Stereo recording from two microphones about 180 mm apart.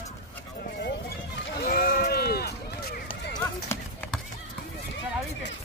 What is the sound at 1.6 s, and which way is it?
Run, 55° left (ahead or behind).